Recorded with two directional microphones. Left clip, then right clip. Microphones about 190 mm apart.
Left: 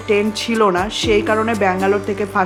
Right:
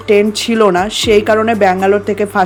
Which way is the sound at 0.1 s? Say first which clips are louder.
Right 6 dB; 30° right (ahead or behind).